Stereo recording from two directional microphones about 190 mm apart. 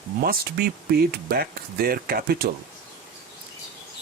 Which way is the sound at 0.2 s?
50° right (ahead or behind).